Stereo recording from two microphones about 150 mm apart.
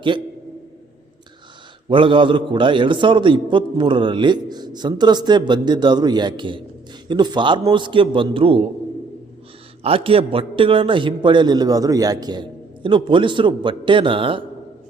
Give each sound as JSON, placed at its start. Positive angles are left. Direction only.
{"t": 1.9, "sound": "a man's voice", "side_deg": -35}
{"t": 9.8, "sound": "a man's voice", "side_deg": -40}